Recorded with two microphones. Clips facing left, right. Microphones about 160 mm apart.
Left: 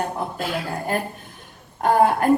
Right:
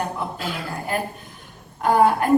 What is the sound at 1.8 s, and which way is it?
Speech, 45° left (ahead or behind).